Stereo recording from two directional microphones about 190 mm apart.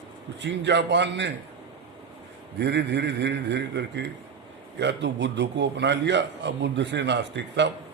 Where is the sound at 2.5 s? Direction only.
65° right (ahead or behind).